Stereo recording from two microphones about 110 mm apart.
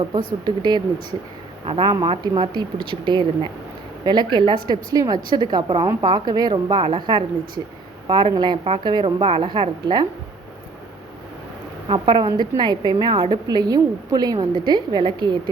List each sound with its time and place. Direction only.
0.1 s a woman's voice: 40° right (ahead or behind)
11.9 s a woman's voice: 45° right (ahead or behind)